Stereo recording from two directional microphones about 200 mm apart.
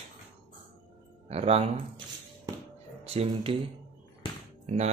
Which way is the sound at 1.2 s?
30° right (ahead or behind).